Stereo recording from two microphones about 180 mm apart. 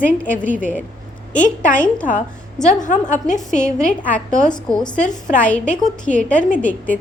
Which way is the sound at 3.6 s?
5° left (ahead or behind).